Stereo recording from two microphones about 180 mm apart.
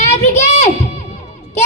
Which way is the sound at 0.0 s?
40° left (ahead or behind).